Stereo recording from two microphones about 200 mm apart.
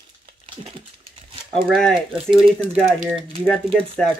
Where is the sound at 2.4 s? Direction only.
30° right (ahead or behind).